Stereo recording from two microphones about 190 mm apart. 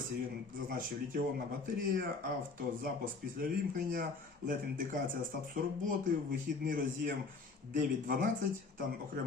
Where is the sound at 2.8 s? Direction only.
50° right (ahead or behind).